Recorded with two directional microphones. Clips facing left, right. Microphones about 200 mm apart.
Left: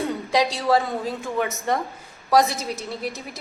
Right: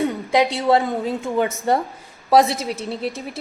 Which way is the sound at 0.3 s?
25° right (ahead or behind).